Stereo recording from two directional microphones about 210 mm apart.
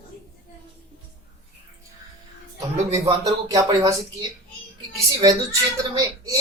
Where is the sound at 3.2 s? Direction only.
15° right (ahead or behind).